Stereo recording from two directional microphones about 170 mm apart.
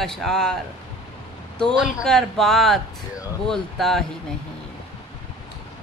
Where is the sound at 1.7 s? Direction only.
Centre (ahead or behind).